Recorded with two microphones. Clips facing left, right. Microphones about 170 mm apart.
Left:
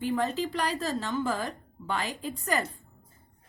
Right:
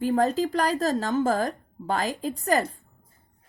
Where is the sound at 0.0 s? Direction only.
40° right (ahead or behind).